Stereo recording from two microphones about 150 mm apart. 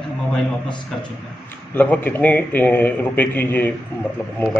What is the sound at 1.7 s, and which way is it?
A man's voice, 10° left (ahead or behind).